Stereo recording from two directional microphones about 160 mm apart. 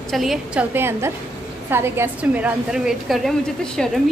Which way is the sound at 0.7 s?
15° right (ahead or behind).